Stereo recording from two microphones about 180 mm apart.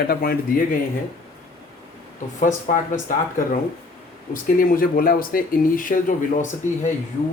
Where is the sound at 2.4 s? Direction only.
45° left (ahead or behind).